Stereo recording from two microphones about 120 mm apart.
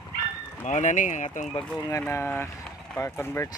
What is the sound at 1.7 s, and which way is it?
Speech, 25° left (ahead or behind).